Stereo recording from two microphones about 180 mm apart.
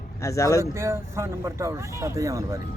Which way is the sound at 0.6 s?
15° right (ahead or behind).